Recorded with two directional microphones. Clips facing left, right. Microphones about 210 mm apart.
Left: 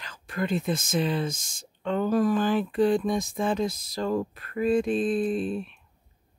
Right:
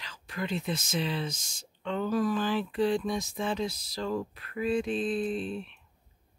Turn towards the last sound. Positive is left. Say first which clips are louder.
# left 5 dB
turn(degrees=45)  # may be behind; listen again after turning